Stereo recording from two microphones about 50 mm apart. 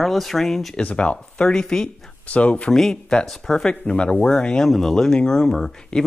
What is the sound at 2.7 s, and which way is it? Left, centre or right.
Speech, centre.